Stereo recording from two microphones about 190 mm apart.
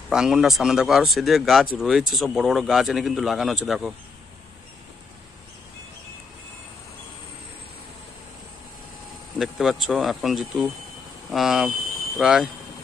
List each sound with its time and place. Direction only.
0.1 s a man's voice: 5° right (ahead or behind)
9.4 s a man's voice: centre (ahead or behind)